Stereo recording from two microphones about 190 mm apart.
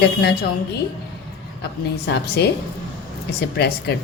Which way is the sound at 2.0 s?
60° left (ahead or behind).